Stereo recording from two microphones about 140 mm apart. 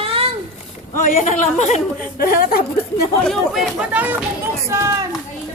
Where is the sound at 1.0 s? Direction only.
65° left (ahead or behind).